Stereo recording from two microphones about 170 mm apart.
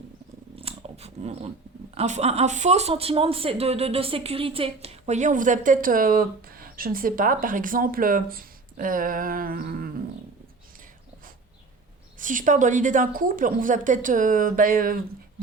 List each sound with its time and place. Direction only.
0.5 s dog: 35° right (ahead or behind)
2.0 s speech: 40° right (ahead or behind); by 9.9 s 60° right (ahead or behind)
12.2 s speech: 50° right (ahead or behind)